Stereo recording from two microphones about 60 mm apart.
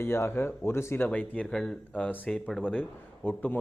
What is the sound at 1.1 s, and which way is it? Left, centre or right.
A man's voice, left.